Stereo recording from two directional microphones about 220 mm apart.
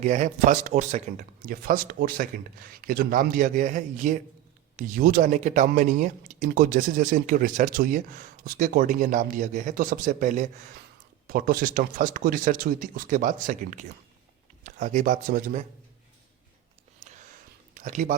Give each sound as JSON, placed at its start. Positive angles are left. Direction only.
{"t": 0.0, "sound": "speech", "side_deg": -35}
{"t": 17.0, "sound": "a sound", "side_deg": -30}
{"t": 17.7, "sound": "speech", "side_deg": -35}